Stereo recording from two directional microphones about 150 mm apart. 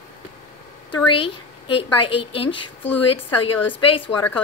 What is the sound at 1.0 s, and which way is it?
A woman's voice, 35° left (ahead or behind).